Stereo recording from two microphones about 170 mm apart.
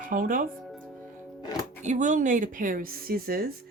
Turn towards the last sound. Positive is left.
turn(degrees=-60)  # may be behind; listen again after turning